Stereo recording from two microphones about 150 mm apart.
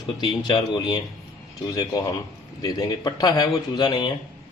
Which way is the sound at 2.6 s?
25° left (ahead or behind).